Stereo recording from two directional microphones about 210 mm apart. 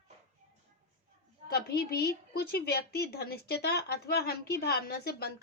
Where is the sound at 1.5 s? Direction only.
50° left (ahead or behind).